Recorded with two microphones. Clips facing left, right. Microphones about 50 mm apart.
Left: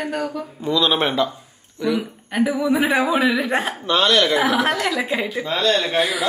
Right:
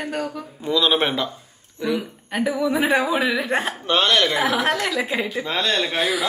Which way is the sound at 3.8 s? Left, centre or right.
Right.